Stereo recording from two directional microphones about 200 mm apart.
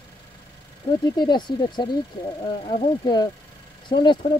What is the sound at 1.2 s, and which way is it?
Speech, 20° left (ahead or behind).